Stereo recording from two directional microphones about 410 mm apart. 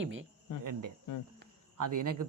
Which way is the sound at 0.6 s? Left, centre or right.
Right.